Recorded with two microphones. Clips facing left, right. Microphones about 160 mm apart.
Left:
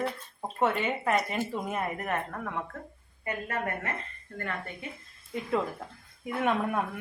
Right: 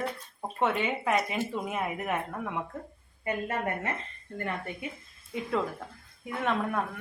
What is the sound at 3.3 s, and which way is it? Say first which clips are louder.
A woman's voice: right 2 dB; 20° right (ahead or behind).